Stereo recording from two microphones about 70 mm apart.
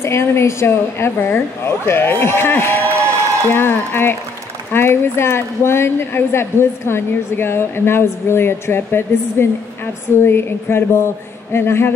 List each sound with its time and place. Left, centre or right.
0.0 s a woman's voice: left